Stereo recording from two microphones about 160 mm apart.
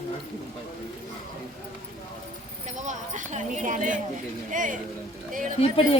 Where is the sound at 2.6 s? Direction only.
50° right (ahead or behind).